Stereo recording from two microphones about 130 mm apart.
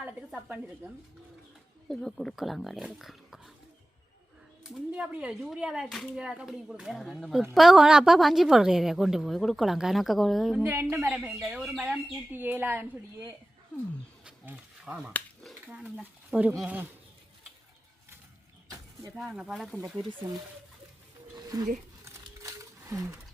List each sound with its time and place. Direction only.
0.0 s a sound: 10° right (ahead or behind)
1.9 s a woman's voice: 5° left (ahead or behind)
4.7 s a woman's voice: 5° right (ahead or behind)
10.6 s a woman's voice: 15° right (ahead or behind)
12.3 s speech: 15° right (ahead or behind)
14.3 s a sound: 10° right (ahead or behind)
15.6 s speech: 10° right (ahead or behind)
19.2 s a woman's voice: centre (ahead or behind)
21.3 s a sound: 25° right (ahead or behind)